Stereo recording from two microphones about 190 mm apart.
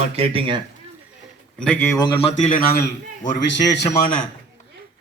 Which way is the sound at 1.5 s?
5° left (ahead or behind).